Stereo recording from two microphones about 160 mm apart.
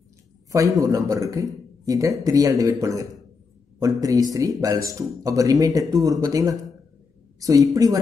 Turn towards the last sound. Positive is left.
turn(degrees=-20)  # may be behind; listen again after turning